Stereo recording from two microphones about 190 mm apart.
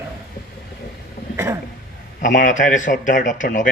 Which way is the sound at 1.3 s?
15° right (ahead or behind).